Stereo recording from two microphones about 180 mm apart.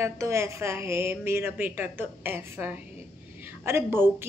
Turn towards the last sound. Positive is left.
turn(degrees=-15)  # may be behind; listen again after turning